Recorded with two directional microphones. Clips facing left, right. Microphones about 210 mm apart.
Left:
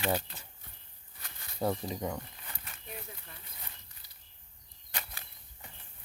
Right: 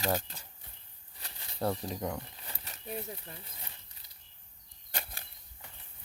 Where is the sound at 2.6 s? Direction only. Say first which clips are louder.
Right 7 dB; 30° right (ahead or behind).